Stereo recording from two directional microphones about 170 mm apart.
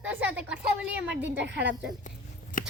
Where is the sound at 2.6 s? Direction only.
50° left (ahead or behind).